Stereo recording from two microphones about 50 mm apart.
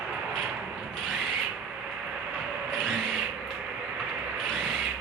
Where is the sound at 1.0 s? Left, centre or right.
Centre.